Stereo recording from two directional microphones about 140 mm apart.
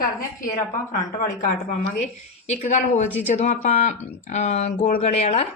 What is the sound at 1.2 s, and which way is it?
Speech, 70° left (ahead or behind).